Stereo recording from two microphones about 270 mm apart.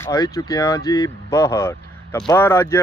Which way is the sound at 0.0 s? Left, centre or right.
Centre.